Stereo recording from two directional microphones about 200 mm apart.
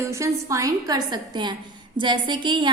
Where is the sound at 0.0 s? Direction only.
15° right (ahead or behind).